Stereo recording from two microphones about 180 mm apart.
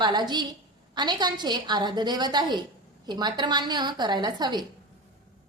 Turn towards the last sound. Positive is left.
turn(degrees=-25)  # may be behind; listen again after turning